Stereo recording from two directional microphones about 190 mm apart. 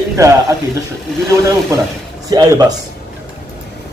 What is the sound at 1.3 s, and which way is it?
Speech, 15° right (ahead or behind).